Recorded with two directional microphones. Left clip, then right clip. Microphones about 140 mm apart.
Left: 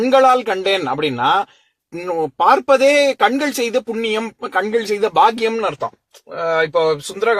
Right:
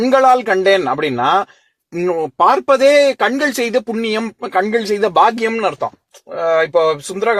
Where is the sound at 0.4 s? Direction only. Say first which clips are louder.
Right 5 dB; 40° right (ahead or behind).